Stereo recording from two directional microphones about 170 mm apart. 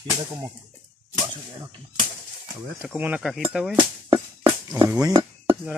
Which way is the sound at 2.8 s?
10° right (ahead or behind).